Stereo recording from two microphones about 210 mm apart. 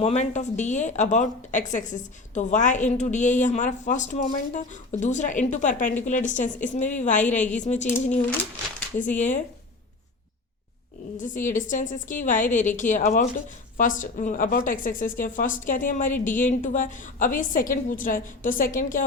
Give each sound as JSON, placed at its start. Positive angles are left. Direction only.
{"t": 0.0, "sound": "a woman's voice", "side_deg": 30}
{"t": 9.0, "sound": "a woman's voice", "side_deg": 35}
{"t": 11.4, "sound": "a woman's voice", "side_deg": 40}